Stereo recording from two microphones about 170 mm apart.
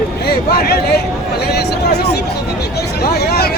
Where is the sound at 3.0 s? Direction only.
65° left (ahead or behind).